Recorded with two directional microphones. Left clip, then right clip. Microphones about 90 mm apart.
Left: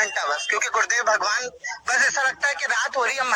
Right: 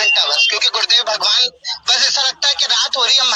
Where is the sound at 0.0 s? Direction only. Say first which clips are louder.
Right 10 dB; 30° right (ahead or behind).